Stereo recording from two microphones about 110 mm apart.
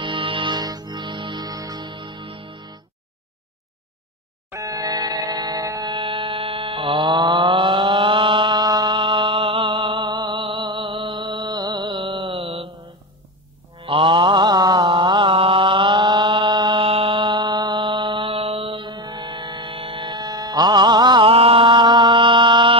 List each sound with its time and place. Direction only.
0.0 s music: 50° right (ahead or behind)
4.5 s a sound: 30° right (ahead or behind)
5.9 s mains hum: 50° right (ahead or behind)
13.7 s mantra: 50° right (ahead or behind)
16.8 s mantra: 60° right (ahead or behind)
18.5 s music: 45° right (ahead or behind)
21.3 s mantra: 60° right (ahead or behind)